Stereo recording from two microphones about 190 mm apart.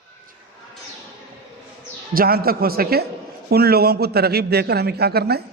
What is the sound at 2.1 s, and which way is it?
A man's voice, 50° right (ahead or behind).